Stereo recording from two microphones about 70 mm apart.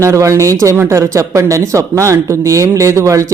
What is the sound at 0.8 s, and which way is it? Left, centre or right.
Speech, right.